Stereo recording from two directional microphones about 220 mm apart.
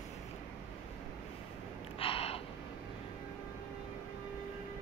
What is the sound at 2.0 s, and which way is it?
Gasp, 25° left (ahead or behind).